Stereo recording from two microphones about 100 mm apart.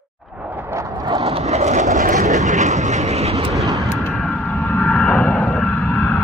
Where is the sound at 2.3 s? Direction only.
90° right.